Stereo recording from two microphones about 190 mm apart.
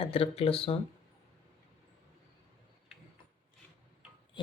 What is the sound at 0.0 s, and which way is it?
Speech, 30° left (ahead or behind).